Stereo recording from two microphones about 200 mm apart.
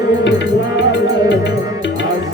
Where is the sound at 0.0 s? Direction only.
60° left (ahead or behind).